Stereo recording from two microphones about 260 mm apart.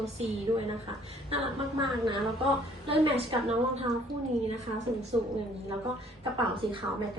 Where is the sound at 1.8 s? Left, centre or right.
Centre.